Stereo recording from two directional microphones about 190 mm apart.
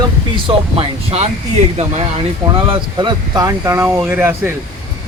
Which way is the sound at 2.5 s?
25° right (ahead or behind).